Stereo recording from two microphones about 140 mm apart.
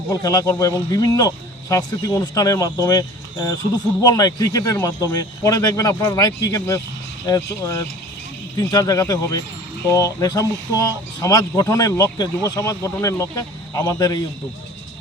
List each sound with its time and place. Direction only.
0.1 s speech: 25° left (ahead or behind)